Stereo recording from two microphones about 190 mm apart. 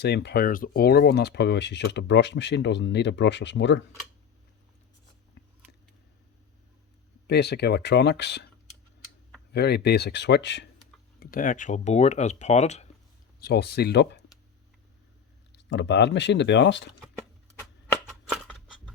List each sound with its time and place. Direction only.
0.0 s speech: 60° left (ahead or behind)
7.3 s speech: 60° left (ahead or behind)
9.5 s speech: 60° left (ahead or behind)
11.2 s speech: 45° left (ahead or behind)
13.4 s speech: 60° left (ahead or behind)
15.5 s speech: 65° left (ahead or behind)